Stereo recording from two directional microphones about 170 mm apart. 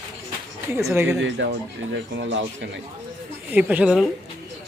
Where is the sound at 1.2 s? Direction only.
85° right.